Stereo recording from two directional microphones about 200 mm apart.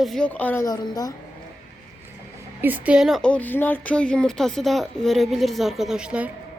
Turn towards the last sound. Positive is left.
turn(degrees=-5)  # may be behind; listen again after turning